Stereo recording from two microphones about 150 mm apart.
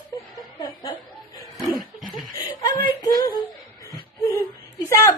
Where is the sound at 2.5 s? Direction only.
30° left (ahead or behind).